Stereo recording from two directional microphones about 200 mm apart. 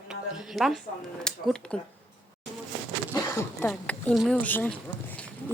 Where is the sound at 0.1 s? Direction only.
Centre (ahead or behind).